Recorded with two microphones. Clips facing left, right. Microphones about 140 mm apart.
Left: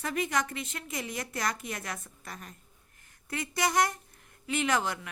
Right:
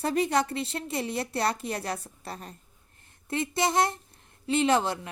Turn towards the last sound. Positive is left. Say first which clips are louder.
# right 5 dB
turn(degrees=-30)  # may be behind; listen again after turning